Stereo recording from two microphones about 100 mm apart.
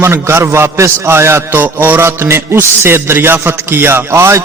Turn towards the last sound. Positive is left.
turn(degrees=-25)  # may be behind; listen again after turning